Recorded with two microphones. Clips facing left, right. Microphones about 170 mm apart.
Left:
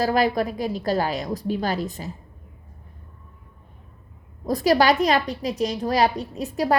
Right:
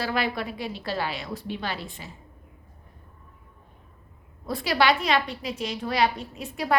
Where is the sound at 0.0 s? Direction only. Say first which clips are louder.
Left 7 dB; 40° left (ahead or behind).